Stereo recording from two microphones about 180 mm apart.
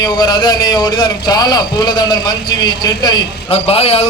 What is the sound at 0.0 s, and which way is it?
A man's voice, 20° left (ahead or behind).